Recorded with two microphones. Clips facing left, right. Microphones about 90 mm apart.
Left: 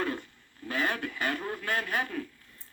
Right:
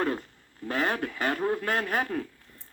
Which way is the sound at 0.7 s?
50° right (ahead or behind).